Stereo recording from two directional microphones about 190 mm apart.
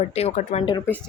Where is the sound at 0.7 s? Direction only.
10° left (ahead or behind).